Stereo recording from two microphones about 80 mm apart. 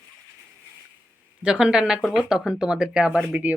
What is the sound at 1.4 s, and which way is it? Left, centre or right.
Speech, centre.